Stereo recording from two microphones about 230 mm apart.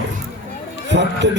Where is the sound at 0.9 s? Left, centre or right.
Right.